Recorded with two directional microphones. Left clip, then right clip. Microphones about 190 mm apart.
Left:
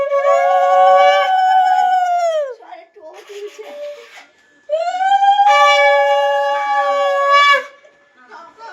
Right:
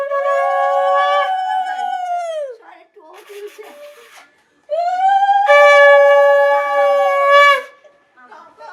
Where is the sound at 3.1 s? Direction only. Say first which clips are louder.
Left 1 dB; 40° right (ahead or behind).